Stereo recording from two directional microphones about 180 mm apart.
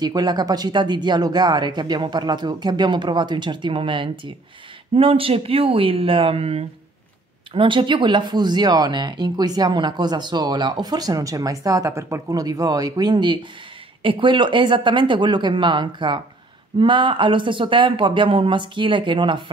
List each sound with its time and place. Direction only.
0.0 s speech: 20° right (ahead or behind)